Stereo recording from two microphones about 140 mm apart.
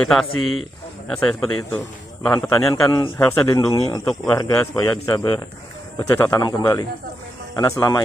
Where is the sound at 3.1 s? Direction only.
20° left (ahead or behind).